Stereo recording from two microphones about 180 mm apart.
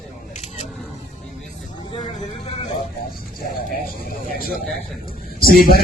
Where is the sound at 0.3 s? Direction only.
40° left (ahead or behind).